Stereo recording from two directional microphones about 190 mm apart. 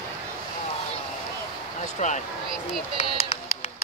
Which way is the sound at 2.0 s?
40° left (ahead or behind).